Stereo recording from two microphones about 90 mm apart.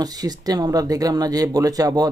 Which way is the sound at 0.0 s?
45° right (ahead or behind).